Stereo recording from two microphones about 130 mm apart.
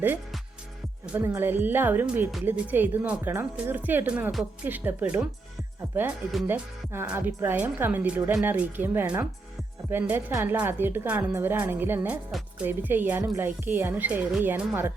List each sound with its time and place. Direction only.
1.2 s speech: 20° right (ahead or behind)
6.5 s speech: 15° right (ahead or behind)